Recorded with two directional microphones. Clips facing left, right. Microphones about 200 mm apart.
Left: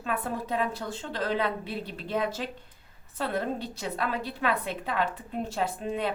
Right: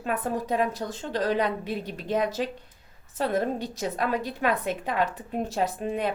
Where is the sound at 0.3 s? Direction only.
15° right (ahead or behind).